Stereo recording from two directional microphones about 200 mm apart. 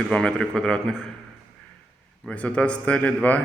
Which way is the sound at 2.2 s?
5° left (ahead or behind).